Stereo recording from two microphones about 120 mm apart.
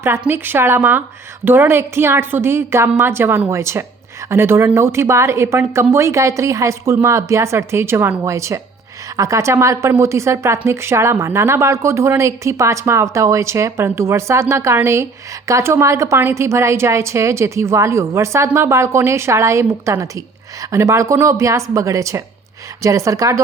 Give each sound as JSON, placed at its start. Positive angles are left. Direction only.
{"t": 0.0, "sound": "a woman's voice", "side_deg": -20}